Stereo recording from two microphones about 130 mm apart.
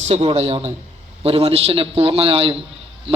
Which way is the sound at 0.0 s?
55° right (ahead or behind).